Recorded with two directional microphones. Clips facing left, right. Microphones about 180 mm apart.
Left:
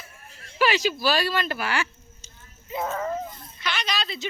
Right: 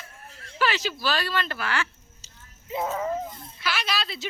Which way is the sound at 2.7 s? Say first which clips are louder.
Even; 10° right (ahead or behind).